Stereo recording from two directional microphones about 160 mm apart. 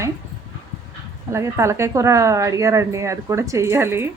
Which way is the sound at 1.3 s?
15° right (ahead or behind).